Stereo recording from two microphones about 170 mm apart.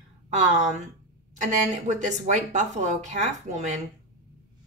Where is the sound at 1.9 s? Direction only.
45° right (ahead or behind).